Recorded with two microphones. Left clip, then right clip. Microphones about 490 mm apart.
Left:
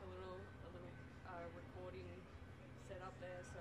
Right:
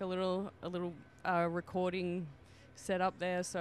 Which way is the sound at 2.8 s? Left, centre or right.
Right.